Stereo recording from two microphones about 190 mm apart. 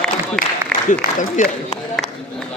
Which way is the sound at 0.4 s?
5° left (ahead or behind).